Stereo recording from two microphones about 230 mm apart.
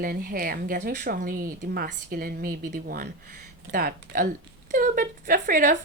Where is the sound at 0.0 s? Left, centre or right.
Right.